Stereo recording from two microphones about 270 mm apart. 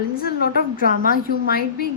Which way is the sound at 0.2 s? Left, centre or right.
Left.